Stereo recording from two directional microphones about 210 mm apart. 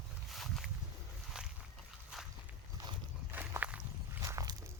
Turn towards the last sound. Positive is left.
turn(degrees=-15)  # may be behind; listen again after turning